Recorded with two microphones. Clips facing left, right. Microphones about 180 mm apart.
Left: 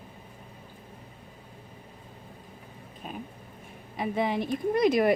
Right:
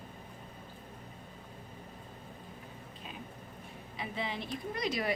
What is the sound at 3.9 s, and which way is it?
A woman's voice, 50° left (ahead or behind).